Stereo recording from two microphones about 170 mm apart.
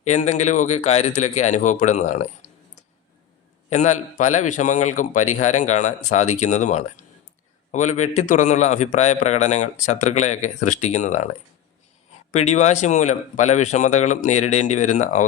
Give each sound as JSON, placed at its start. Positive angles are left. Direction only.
{"t": 0.0, "sound": "a man's voice", "side_deg": 45}
{"t": 3.7, "sound": "a man's voice", "side_deg": 45}
{"t": 12.3, "sound": "a man's voice", "side_deg": 40}